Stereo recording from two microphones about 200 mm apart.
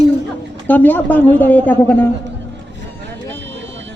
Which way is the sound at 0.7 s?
10° left (ahead or behind).